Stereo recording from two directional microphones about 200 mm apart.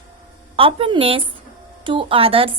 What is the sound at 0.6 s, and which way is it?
A woman's voice, 30° right (ahead or behind).